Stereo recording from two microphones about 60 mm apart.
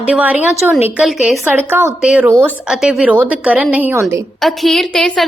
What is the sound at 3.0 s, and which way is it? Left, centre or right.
Speech, right.